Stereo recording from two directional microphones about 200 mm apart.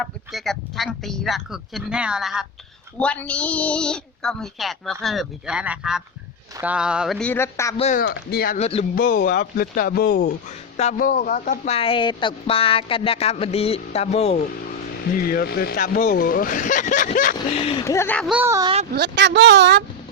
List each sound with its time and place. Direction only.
0.0 s speech: centre (ahead or behind)
7.8 s speech: 35° left (ahead or behind)
8.0 s speech: 50° left (ahead or behind)
8.5 s speech: 30° left (ahead or behind)
9.0 s speech: 45° left (ahead or behind)
15.2 s speech: 50° left (ahead or behind)
17.8 s speech: 10° left (ahead or behind)
18.3 s speech: 10° right (ahead or behind)
18.9 s speech: 60° right (ahead or behind)